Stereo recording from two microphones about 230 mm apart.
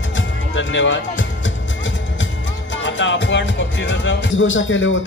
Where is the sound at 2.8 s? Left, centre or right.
Left.